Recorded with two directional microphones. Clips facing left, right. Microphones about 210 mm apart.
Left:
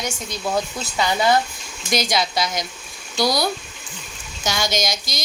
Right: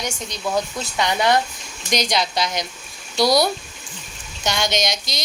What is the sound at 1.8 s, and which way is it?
A woman's voice, 5° left (ahead or behind).